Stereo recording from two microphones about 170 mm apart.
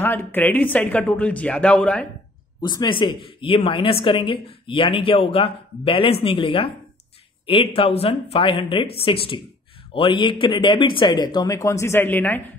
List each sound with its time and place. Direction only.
0.0 s speech: 15° left (ahead or behind)
2.6 s a woman's voice: 25° left (ahead or behind)